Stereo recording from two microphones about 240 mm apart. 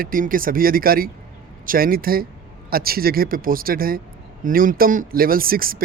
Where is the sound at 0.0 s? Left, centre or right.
Right.